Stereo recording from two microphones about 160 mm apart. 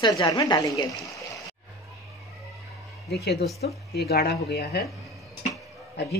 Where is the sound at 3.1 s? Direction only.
90° left.